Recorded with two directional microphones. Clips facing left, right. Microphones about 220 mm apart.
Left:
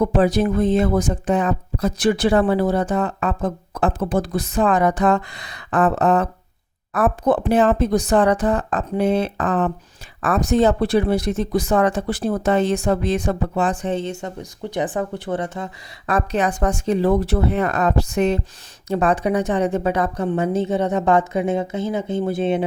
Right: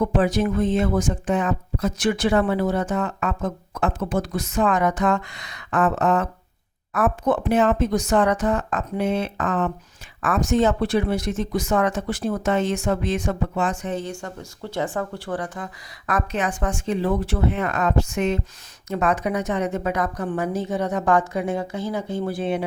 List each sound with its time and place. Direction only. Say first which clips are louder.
0.0 s a woman's voice: left 3 dB; 35° left (ahead or behind)